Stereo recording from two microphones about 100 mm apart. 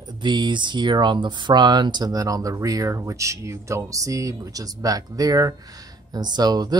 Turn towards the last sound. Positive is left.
turn(degrees=-40)  # may be behind; listen again after turning